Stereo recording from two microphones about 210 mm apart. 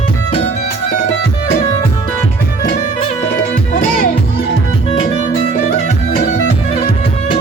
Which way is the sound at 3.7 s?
40° left (ahead or behind).